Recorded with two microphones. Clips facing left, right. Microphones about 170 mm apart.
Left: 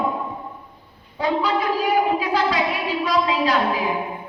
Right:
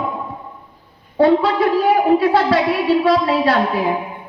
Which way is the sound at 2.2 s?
60° right (ahead or behind).